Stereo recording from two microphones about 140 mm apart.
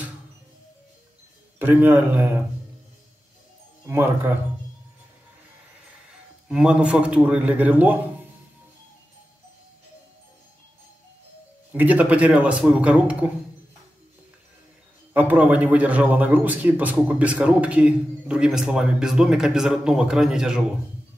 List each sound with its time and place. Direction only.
1.6 s a man's voice: 15° right (ahead or behind)
3.8 s a man's voice: 15° right (ahead or behind)
6.5 s a man's voice: 5° right (ahead or behind)
11.7 s a man's voice: 10° right (ahead or behind)
15.1 s a man's voice: 10° right (ahead or behind)